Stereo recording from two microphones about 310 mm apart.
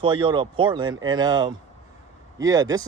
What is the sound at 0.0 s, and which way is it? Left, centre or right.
Speech, centre.